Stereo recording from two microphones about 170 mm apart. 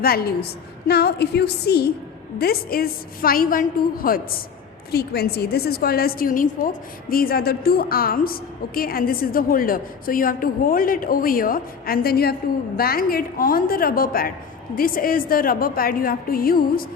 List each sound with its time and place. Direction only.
0.0 s a woman's voice: 65° left (ahead or behind)